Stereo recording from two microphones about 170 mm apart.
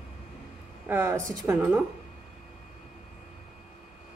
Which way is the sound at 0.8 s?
15° right (ahead or behind).